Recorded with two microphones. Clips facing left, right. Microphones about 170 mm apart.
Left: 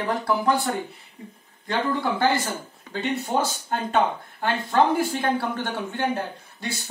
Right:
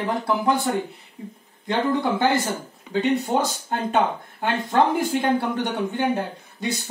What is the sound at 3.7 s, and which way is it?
Speech, 15° right (ahead or behind).